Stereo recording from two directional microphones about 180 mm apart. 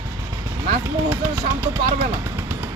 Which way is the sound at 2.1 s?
15° right (ahead or behind).